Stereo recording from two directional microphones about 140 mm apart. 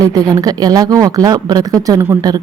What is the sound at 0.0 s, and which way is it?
Speech, 25° right (ahead or behind).